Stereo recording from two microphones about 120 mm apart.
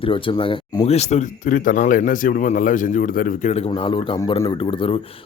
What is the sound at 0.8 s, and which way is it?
Speech, 65° left (ahead or behind).